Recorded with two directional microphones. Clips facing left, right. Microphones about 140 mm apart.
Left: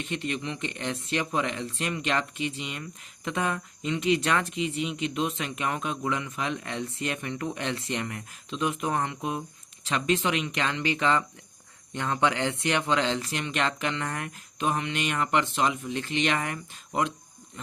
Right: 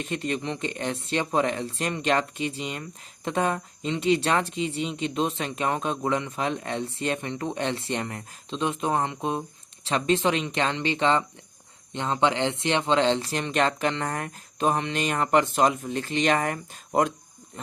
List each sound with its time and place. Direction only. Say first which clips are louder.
0.0 s speech: right 3 dB; 40° right (ahead or behind)